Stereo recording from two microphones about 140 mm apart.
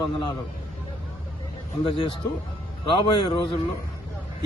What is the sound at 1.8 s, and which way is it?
A man's voice, 40° left (ahead or behind).